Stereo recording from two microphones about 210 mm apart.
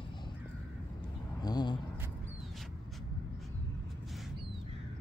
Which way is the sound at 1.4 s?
20° left (ahead or behind).